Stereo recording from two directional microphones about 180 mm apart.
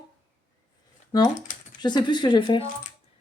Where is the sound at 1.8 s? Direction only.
25° left (ahead or behind).